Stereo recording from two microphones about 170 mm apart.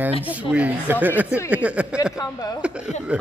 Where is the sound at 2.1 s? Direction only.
20° left (ahead or behind).